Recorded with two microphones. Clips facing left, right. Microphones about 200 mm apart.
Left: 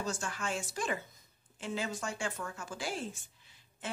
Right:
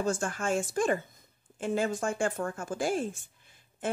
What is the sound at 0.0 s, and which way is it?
Speech, 50° right (ahead or behind).